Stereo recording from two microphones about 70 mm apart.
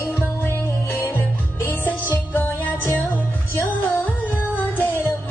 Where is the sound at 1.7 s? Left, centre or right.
Left.